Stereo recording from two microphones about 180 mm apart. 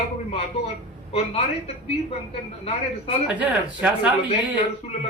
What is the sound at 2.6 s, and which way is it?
Speech, 30° left (ahead or behind).